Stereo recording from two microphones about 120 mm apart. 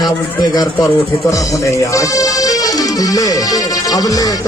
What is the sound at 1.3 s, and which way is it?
Speech, 30° left (ahead or behind).